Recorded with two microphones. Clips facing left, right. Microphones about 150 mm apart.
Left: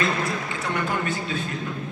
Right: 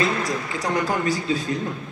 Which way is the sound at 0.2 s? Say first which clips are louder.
Right 2 dB; 35° right (ahead or behind).